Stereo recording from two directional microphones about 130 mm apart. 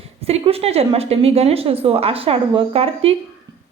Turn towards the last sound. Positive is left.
turn(degrees=-45)  # may be behind; listen again after turning